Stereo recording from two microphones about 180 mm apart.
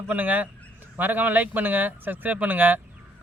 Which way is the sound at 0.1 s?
10° right (ahead or behind).